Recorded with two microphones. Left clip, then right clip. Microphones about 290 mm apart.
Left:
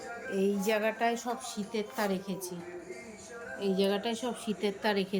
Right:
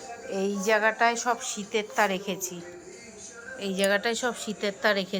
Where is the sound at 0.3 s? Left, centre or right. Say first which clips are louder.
Right 4 dB; centre.